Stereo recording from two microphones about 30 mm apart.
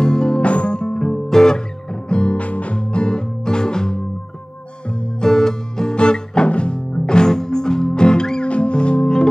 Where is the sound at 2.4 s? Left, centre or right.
Left.